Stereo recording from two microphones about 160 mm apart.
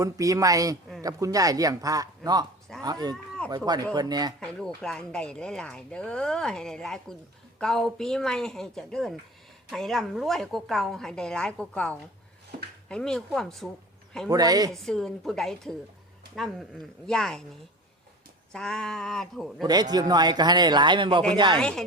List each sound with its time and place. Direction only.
0.0 s a man's voice: 20° right (ahead or behind)
4.4 s speech: 5° left (ahead or behind)
14.3 s a man's voice: 25° right (ahead or behind)
14.7 s speech: 5° left (ahead or behind)
18.5 s speech: 5° left (ahead or behind)
19.6 s a man's voice: 25° right (ahead or behind)
21.6 s speech: 5° left (ahead or behind)